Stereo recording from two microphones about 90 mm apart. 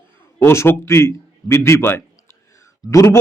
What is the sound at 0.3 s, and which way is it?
A man's voice, 30° left (ahead or behind).